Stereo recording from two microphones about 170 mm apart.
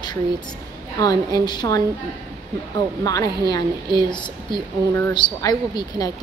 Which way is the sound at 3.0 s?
20° left (ahead or behind).